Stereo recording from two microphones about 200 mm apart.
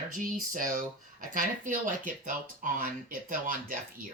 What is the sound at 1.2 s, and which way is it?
Speech, 40° right (ahead or behind).